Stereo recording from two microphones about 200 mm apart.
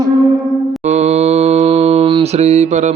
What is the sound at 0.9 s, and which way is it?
Mantra, 35° right (ahead or behind).